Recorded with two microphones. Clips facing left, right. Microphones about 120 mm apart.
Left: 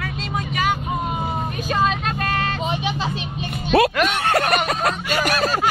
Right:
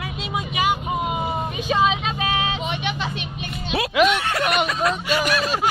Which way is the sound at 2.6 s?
35° left (ahead or behind).